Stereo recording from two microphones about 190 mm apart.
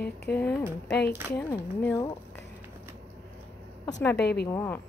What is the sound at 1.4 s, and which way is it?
Speech, 10° left (ahead or behind).